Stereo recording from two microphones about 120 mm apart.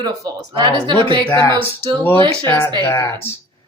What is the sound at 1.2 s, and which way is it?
Speech, 20° left (ahead or behind).